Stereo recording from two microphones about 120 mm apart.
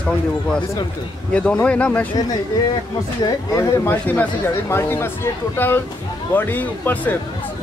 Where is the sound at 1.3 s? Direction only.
10° left (ahead or behind).